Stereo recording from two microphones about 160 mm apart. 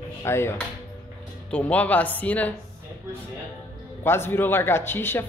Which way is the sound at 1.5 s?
10° left (ahead or behind).